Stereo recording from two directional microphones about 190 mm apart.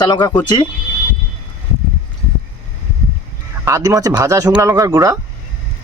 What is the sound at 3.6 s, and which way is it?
Speech, 15° right (ahead or behind).